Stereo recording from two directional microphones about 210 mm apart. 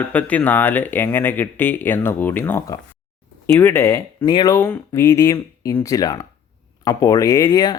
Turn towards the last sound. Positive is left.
turn(degrees=20)  # may be behind; listen again after turning